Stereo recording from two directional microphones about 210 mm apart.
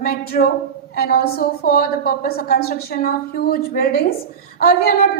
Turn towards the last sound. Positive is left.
turn(degrees=45)  # may be behind; listen again after turning